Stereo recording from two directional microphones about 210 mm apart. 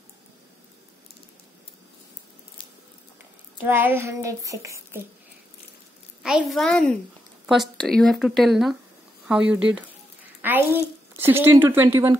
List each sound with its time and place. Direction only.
3.5 s a woman's voice: 10° right (ahead or behind)
6.2 s a woman's voice: centre (ahead or behind)